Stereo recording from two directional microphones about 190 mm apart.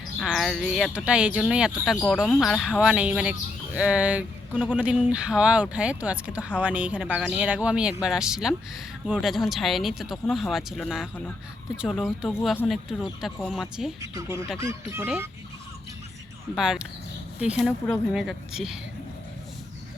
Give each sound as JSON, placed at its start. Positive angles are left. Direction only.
{"t": 0.2, "sound": "speech", "side_deg": 0}
{"t": 14.0, "sound": "speech", "side_deg": -15}
{"t": 16.6, "sound": "speech", "side_deg": -5}